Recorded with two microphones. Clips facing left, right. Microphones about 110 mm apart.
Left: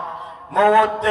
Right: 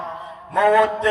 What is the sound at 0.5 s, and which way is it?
Mantra, 35° left (ahead or behind).